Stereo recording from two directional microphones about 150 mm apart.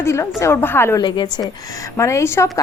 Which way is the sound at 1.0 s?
30° left (ahead or behind).